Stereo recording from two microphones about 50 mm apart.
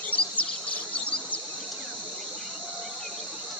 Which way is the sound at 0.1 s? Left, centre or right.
Left.